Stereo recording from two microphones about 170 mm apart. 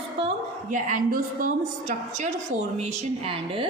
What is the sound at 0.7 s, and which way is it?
A woman's voice, 50° right (ahead or behind).